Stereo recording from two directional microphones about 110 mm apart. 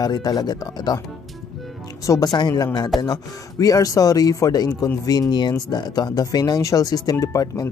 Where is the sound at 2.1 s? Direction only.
40° left (ahead or behind).